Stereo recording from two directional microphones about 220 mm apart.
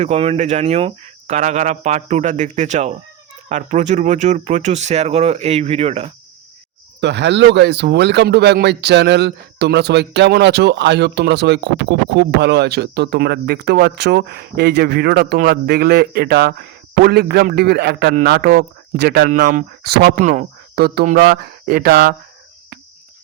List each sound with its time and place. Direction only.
0.0 s speech: 30° right (ahead or behind)
7.0 s speech: 50° right (ahead or behind)